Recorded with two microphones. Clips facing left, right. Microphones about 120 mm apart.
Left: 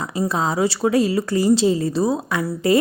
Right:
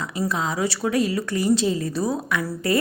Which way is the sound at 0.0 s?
30° left (ahead or behind).